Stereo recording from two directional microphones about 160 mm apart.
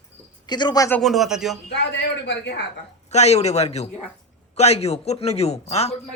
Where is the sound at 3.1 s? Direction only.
45° left (ahead or behind).